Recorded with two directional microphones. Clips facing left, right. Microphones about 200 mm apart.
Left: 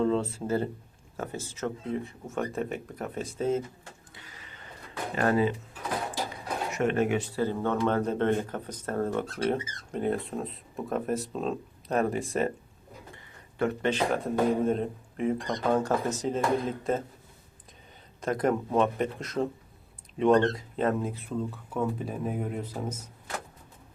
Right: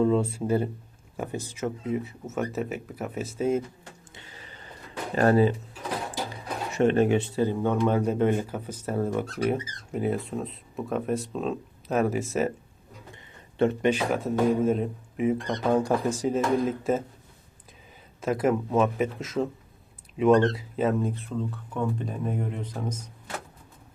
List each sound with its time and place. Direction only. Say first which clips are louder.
0.0 s speech: right 3 dB; 10° right (ahead or behind)
4.1 s neigh: right 3 dB; 25° right (ahead or behind)
5.1 s speech: right 5 dB; 35° right (ahead or behind)
6.7 s speech: right 5 dB; 30° right (ahead or behind); by 12.5 s 5° right (ahead or behind)
13.6 s speech: right 5 dB; 25° right (ahead or behind)
13.9 s speech: right 1 dB; 5° right (ahead or behind)
18.2 s speech: right 2 dB; 5° right (ahead or behind)